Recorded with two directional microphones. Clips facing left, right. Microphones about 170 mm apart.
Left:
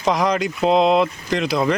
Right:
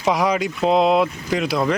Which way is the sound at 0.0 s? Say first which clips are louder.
Even; 5° right (ahead or behind).